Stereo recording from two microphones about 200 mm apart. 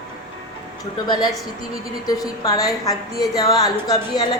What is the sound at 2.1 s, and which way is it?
A woman's voice, 20° left (ahead or behind).